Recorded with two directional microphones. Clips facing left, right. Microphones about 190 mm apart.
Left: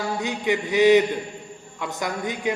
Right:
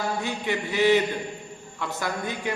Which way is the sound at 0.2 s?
20° left (ahead or behind).